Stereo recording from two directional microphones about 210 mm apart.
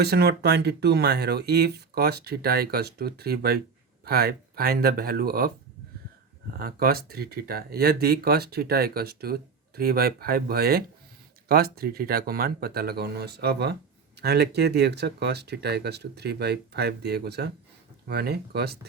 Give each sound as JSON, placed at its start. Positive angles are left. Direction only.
{"t": 0.0, "sound": "speech", "side_deg": -50}
{"t": 6.6, "sound": "speech", "side_deg": -45}